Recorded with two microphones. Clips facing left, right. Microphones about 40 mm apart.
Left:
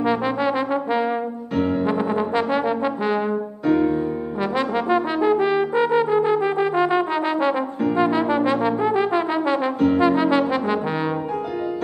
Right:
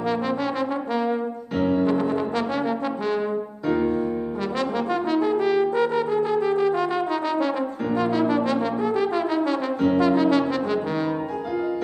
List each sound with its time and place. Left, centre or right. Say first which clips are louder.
0.0 s brass instrument: left 4 dB; left
3.6 s music: left 4 dB; centre
4.6 s brass instrument: left 5 dB; left